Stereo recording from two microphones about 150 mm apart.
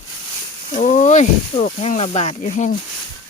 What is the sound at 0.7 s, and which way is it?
Speech, 55° left (ahead or behind).